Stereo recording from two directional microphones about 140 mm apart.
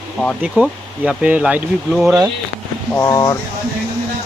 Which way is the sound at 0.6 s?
10° right (ahead or behind).